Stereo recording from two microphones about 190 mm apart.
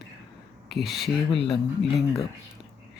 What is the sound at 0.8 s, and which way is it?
Speech, centre (ahead or behind).